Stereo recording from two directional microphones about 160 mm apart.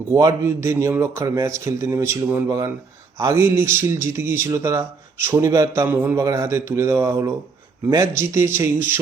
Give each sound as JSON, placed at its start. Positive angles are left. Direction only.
{"t": 0.1, "sound": "speech", "side_deg": -20}